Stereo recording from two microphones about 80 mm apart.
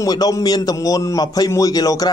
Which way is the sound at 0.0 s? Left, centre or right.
Left.